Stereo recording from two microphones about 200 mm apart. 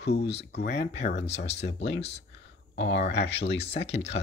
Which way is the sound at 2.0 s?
35° left (ahead or behind).